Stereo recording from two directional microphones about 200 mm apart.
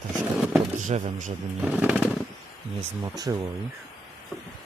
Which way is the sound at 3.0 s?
20° right (ahead or behind).